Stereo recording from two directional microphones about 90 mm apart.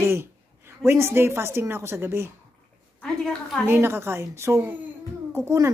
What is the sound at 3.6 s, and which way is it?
Speech, 25° right (ahead or behind).